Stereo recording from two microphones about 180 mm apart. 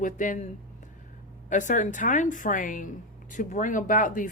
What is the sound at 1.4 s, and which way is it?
Speech, 45° left (ahead or behind).